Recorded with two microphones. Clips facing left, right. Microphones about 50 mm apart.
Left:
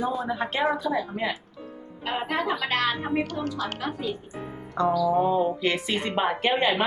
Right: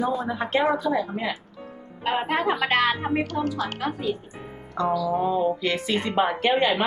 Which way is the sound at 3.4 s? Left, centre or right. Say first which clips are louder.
Right 2 dB; centre.